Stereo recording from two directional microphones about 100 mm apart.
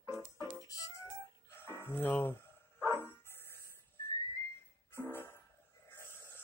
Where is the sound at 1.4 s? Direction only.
25° left (ahead or behind).